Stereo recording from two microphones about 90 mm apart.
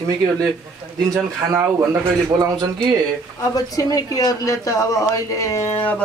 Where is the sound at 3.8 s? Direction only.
40° left (ahead or behind).